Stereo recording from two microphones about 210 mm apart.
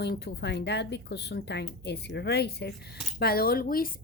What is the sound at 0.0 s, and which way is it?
A woman's voice, 50° left (ahead or behind).